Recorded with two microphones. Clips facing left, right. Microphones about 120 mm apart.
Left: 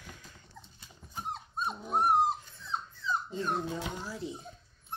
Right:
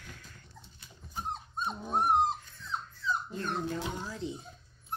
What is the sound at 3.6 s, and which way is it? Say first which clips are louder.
Speech: right 1 dB; 10° left (ahead or behind).